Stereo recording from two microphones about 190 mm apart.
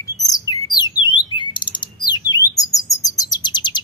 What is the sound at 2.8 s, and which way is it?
Chirp, 20° left (ahead or behind).